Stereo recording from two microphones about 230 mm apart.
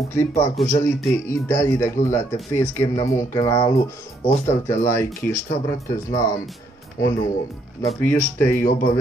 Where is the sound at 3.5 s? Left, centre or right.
Left.